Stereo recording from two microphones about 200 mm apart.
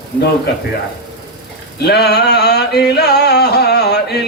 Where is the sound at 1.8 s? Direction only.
55° left (ahead or behind).